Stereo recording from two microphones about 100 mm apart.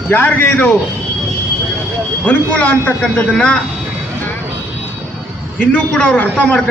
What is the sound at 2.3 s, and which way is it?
A man's voice, 15° left (ahead or behind).